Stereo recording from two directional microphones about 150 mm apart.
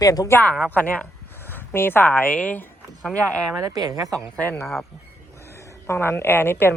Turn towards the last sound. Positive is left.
turn(degrees=15)  # may be behind; listen again after turning